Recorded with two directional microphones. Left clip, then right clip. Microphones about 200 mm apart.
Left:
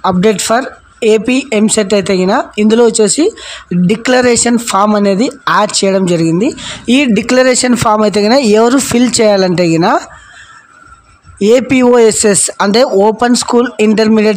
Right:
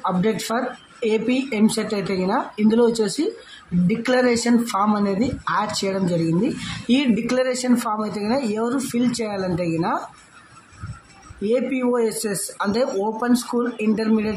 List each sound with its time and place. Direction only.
0.0 s speech: 45° left (ahead or behind)
11.4 s speech: 50° left (ahead or behind)